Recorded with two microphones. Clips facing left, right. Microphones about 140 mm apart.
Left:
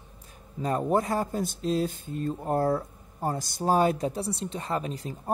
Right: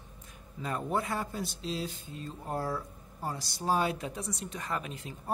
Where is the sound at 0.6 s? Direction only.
40° left (ahead or behind).